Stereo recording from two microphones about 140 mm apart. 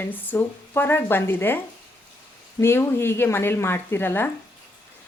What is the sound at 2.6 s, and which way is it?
Speech, 15° left (ahead or behind).